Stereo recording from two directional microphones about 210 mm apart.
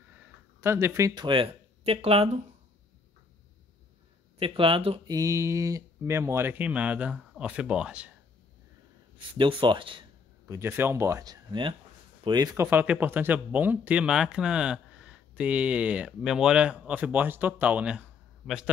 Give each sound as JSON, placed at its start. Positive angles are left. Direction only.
{"t": 0.6, "sound": "speech", "side_deg": -10}
{"t": 4.4, "sound": "speech", "side_deg": -25}
{"t": 9.3, "sound": "speech", "side_deg": -25}
{"t": 10.4, "sound": "speech", "side_deg": -10}